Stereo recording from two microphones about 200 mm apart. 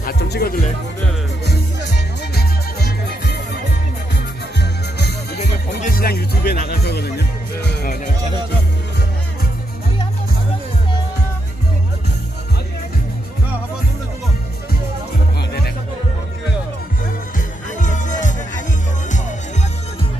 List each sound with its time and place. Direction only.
0.0 s music: 50° left (ahead or behind)
2.0 s music: 50° left (ahead or behind)
4.6 s music: 55° left (ahead or behind)
5.4 s music: 45° left (ahead or behind)
17.7 s music: 40° left (ahead or behind)